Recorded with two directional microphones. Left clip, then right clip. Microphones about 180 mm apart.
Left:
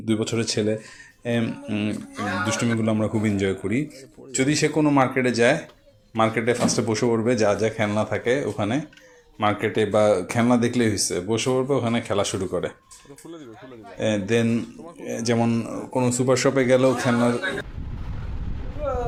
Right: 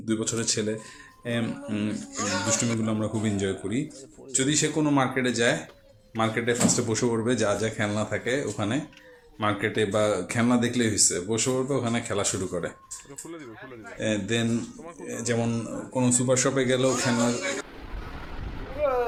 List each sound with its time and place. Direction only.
0.0 s speech: 20° left (ahead or behind)
14.0 s speech: 25° left (ahead or behind)